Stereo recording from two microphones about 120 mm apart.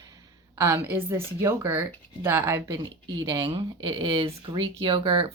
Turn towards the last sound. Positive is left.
turn(degrees=-45)  # may be behind; listen again after turning